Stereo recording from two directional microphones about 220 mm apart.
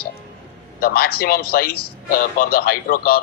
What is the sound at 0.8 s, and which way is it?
A man's voice, 45° left (ahead or behind).